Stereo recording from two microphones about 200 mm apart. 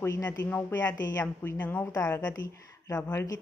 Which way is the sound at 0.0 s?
15° left (ahead or behind).